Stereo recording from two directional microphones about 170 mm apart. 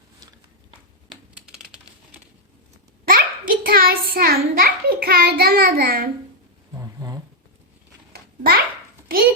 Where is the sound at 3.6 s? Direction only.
60° right (ahead or behind).